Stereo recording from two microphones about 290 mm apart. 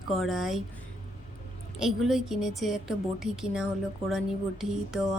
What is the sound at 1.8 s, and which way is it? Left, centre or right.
Speech, centre.